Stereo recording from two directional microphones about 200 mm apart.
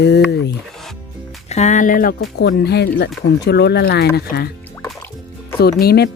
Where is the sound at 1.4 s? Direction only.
35° left (ahead or behind).